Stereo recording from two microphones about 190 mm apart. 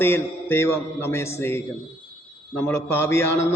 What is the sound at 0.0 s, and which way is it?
A man's voice, 10° left (ahead or behind).